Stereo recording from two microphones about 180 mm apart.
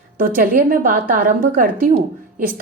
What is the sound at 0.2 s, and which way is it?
A woman's voice, 50° right (ahead or behind).